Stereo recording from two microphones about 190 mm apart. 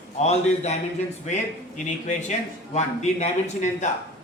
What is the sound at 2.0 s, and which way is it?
Speech, 35° left (ahead or behind).